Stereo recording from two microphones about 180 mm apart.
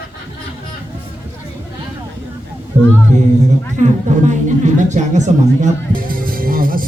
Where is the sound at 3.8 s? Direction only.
40° right (ahead or behind).